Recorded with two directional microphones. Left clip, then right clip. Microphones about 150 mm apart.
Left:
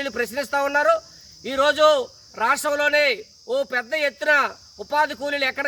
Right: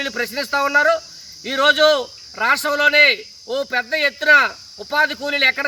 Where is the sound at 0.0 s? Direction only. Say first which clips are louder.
Right 2 dB; 45° left (ahead or behind).